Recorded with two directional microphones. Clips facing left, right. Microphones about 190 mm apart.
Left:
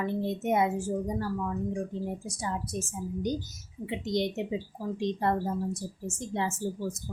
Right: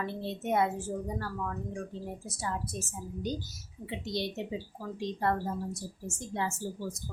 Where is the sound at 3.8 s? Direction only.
20° left (ahead or behind).